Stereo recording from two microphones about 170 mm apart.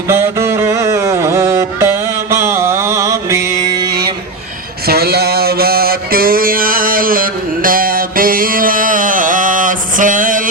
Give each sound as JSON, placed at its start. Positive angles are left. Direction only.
{"t": 0.1, "sound": "music", "side_deg": -15}
{"t": 4.9, "sound": "mantra", "side_deg": -70}